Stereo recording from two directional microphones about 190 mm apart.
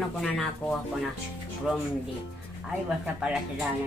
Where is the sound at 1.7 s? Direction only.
5° right (ahead or behind).